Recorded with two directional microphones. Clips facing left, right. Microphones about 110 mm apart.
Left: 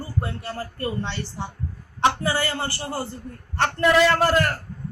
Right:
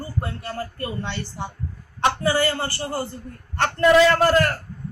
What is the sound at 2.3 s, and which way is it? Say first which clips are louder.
Speech: right 4 dB; 25° left (ahead or behind).